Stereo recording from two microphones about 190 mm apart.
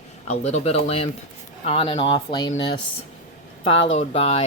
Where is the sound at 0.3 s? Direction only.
35° left (ahead or behind).